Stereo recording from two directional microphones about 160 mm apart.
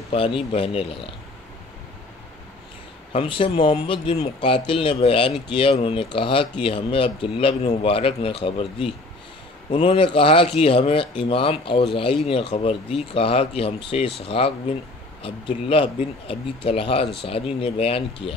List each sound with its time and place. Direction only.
0.1 s speech: 35° left (ahead or behind)
3.1 s speech: 35° left (ahead or behind)